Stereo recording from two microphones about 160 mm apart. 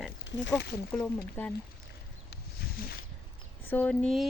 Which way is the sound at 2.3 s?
75° left (ahead or behind).